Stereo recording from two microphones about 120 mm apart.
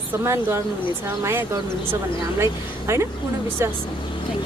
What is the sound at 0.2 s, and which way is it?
Speech, 20° right (ahead or behind).